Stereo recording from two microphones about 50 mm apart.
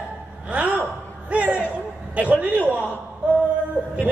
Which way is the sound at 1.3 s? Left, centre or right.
Right.